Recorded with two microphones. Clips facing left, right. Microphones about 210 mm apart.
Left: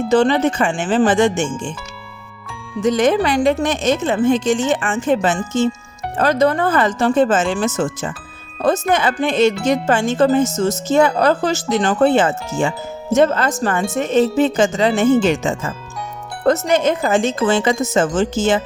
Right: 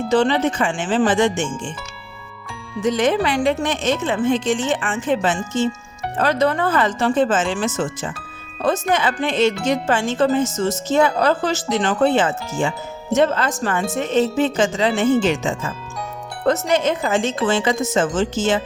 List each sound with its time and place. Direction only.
0.1 s speech: 45° left (ahead or behind)
2.8 s speech: 45° left (ahead or behind)